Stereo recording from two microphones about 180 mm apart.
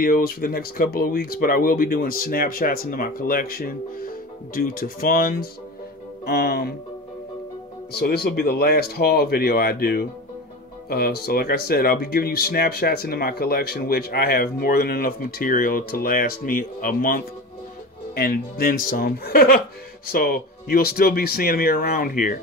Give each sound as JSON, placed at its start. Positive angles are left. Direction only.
{"t": 0.0, "sound": "speech", "side_deg": 55}
{"t": 7.9, "sound": "speech", "side_deg": 60}